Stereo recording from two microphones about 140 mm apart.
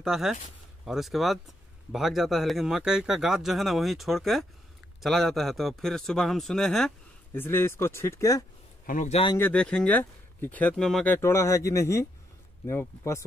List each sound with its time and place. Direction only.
0.0 s speech: 5° right (ahead or behind)
7.3 s speech: 15° left (ahead or behind)
8.8 s speech: 70° left (ahead or behind)
9.4 s speech: 10° left (ahead or behind)
11.1 s speech: 20° left (ahead or behind)